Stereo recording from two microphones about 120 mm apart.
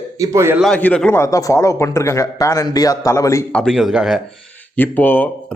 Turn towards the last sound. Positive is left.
turn(degrees=15)  # may be behind; listen again after turning